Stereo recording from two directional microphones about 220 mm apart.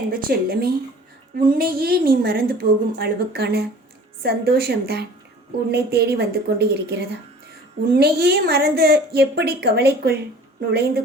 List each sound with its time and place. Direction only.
0.1 s a woman's voice: 45° right (ahead or behind)